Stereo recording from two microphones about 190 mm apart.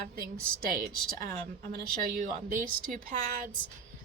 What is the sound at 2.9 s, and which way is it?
Speech, 40° right (ahead or behind).